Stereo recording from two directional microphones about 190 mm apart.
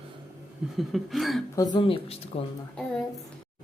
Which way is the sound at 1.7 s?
30° left (ahead or behind).